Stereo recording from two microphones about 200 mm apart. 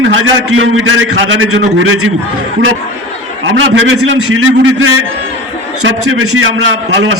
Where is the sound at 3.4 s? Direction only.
70° right (ahead or behind); by 6.4 s 90° right.